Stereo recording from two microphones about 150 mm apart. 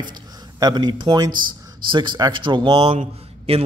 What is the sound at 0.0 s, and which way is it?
Speech, 25° right (ahead or behind).